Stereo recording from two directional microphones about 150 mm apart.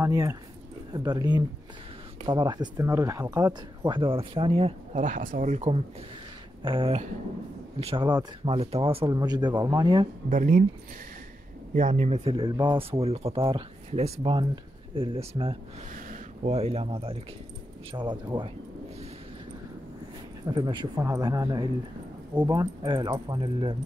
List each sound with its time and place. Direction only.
0.0 s speech: 20° right (ahead or behind)
3.9 s speech: 35° right (ahead or behind)
5.0 s speech: 65° right (ahead or behind)
6.6 s speech: 35° right (ahead or behind)
8.5 s speech: 40° right (ahead or behind); by 10.0 s 25° right (ahead or behind)
10.3 s speech: 55° right (ahead or behind)
11.7 s speech: 55° right (ahead or behind); by 15.5 s 35° right (ahead or behind)
15.9 s a sound: 60° right (ahead or behind)
16.5 s speech: 40° right (ahead or behind)
20.5 s speech: 30° right (ahead or behind)